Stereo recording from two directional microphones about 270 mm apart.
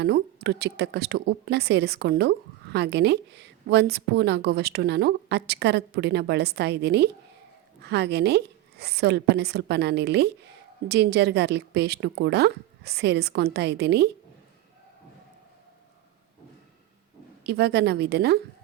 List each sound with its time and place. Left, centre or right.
0.0 s a woman's voice: right
17.4 s a woman's voice: right